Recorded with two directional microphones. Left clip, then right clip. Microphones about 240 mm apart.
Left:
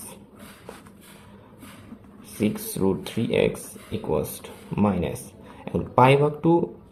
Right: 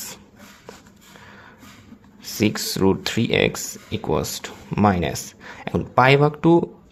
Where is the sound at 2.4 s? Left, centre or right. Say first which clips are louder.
Right 5 dB; right.